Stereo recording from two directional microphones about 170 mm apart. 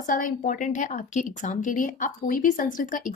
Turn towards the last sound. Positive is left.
turn(degrees=50)  # may be behind; listen again after turning